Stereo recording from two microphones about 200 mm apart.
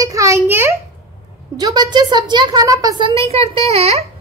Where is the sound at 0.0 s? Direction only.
15° right (ahead or behind).